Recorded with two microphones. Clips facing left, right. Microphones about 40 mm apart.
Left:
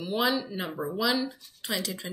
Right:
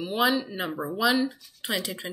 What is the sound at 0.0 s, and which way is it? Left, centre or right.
A woman's voice, centre.